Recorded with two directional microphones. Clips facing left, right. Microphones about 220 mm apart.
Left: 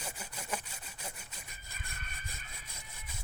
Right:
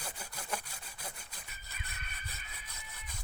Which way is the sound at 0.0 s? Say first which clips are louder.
Left 1 dB; 10° left (ahead or behind).